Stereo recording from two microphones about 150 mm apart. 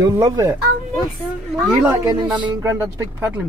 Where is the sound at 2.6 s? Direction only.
20° right (ahead or behind).